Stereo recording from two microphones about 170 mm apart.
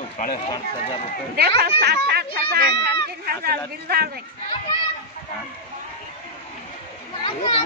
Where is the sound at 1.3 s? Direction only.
70° right (ahead or behind).